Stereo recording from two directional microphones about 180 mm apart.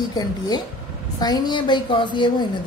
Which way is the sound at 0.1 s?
20° left (ahead or behind).